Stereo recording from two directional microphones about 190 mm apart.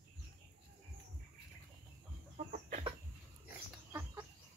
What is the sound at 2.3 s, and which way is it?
Chicken, 40° right (ahead or behind).